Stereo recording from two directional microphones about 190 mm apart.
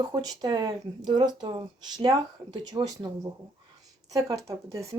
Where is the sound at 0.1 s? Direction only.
20° right (ahead or behind).